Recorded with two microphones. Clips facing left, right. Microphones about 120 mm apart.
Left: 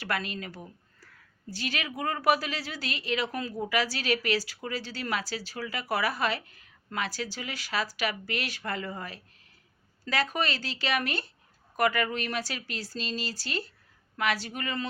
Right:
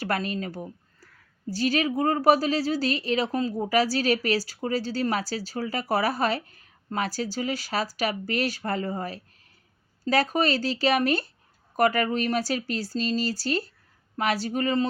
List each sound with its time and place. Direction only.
0.0 s speech: 40° right (ahead or behind)